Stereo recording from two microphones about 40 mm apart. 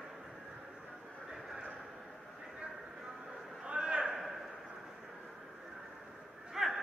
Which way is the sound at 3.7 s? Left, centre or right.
Right.